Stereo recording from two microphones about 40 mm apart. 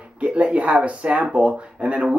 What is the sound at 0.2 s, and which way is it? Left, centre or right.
Speech, right.